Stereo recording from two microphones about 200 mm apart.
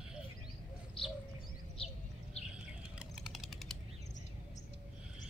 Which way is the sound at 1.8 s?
30° left (ahead or behind).